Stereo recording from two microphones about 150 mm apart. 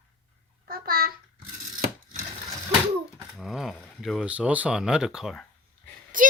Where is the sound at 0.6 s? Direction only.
85° right.